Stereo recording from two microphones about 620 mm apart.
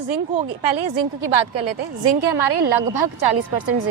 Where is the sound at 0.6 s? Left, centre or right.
Right.